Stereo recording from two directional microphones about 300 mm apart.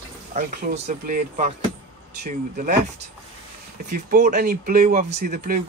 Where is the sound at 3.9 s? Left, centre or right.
Right.